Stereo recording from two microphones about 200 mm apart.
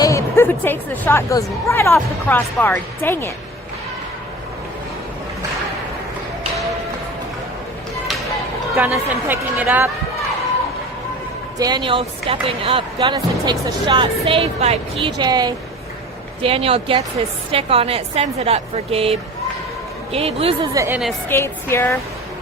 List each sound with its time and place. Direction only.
0.0 s speech: 15° left (ahead or behind)
8.7 s speech: 10° right (ahead or behind)
11.5 s speech: 20° right (ahead or behind)
20.7 s speech: 10° right (ahead or behind)
21.2 s speech: 10° left (ahead or behind)